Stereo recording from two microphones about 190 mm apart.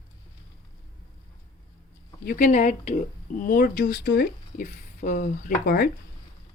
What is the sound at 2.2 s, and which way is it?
Speech, 45° left (ahead or behind).